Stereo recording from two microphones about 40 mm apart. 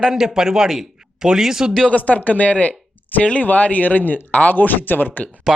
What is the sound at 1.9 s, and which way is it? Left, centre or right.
A man's voice, left.